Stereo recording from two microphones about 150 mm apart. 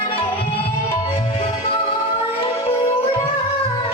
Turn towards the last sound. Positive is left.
turn(degrees=40)  # may be behind; listen again after turning